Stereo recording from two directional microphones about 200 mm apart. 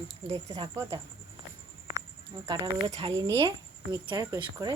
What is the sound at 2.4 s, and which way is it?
Speech, 30° right (ahead or behind).